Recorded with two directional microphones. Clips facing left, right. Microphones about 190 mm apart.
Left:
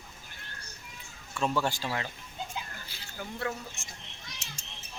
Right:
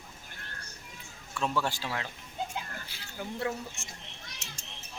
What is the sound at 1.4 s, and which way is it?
Speech, 5° left (ahead or behind).